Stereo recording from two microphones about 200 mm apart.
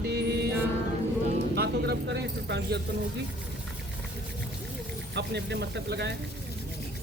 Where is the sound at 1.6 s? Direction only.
55° right (ahead or behind).